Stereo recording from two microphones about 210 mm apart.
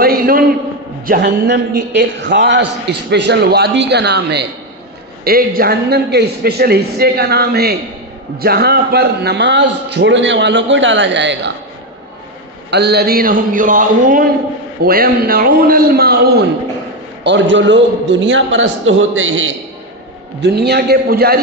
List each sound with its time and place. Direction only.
0.0 s a sound: 45° right (ahead or behind)
1.0 s a man's voice: 45° right (ahead or behind)
12.7 s a man's voice: 50° right (ahead or behind)
17.2 s a man's voice: 60° right (ahead or behind)
20.4 s a man's voice: 50° right (ahead or behind)